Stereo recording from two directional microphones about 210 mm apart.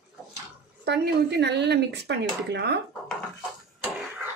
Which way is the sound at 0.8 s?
55° right (ahead or behind).